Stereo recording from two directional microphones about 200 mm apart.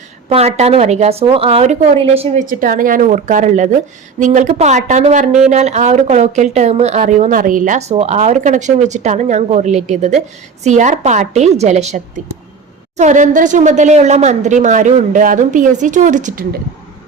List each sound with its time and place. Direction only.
0.3 s speech: 30° right (ahead or behind)
2.5 s speech: 45° right (ahead or behind)